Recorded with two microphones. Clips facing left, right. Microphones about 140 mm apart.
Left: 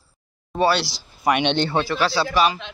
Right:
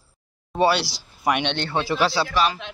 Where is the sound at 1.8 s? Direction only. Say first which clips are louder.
Even; 10° right (ahead or behind).